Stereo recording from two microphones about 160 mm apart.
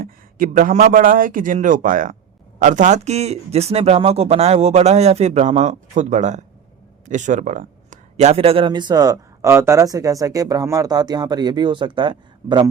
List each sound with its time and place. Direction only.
0.0 s a man's voice: 60° right (ahead or behind); by 12.6 s 30° right (ahead or behind)